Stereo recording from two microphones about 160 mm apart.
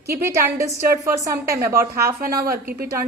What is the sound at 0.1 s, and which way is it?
A woman's voice, 15° right (ahead or behind).